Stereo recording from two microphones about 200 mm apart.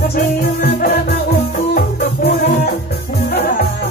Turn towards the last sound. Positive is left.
turn(degrees=50)  # may be behind; listen again after turning